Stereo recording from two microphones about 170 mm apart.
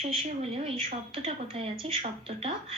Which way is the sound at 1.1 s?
35° right (ahead or behind).